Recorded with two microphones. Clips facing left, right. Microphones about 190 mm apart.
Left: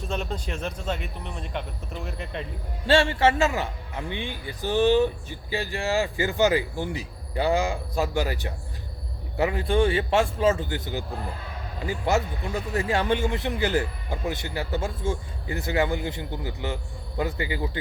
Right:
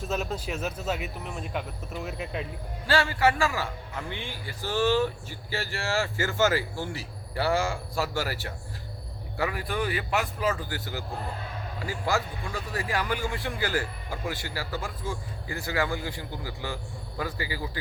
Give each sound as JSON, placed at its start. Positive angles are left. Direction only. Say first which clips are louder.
{"t": 0.0, "sound": "speech", "louder": "even", "side_deg": -5}
{"t": 2.8, "sound": "a man's voice", "louder": "left 4 dB", "side_deg": 25}